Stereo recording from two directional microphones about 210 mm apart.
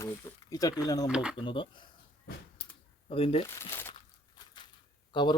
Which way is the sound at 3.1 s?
25° left (ahead or behind).